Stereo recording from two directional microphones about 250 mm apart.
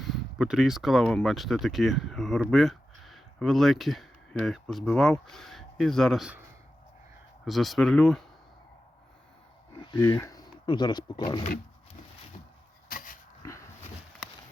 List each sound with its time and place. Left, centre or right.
0.0 s speech: centre
7.4 s speech: centre
9.9 s speech: centre
12.9 s dog: left